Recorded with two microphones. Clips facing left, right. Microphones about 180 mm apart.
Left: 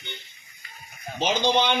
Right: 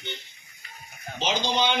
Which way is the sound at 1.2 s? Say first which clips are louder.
Left 3 dB; 60° left (ahead or behind).